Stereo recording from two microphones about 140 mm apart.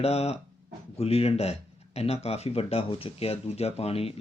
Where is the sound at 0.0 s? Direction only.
50° left (ahead or behind).